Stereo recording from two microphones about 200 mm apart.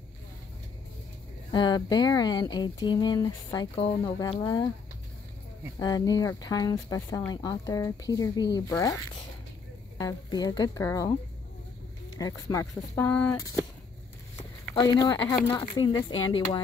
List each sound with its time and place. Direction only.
1.5 s speech: 20° left (ahead or behind)
5.8 s speech: 20° left (ahead or behind)
9.9 s speech: 20° left (ahead or behind)
12.2 s speech: 15° left (ahead or behind)
14.7 s speech: 20° left (ahead or behind)